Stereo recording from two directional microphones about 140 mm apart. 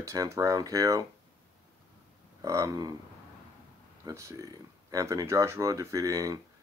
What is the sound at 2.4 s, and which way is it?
Speech, 25° right (ahead or behind).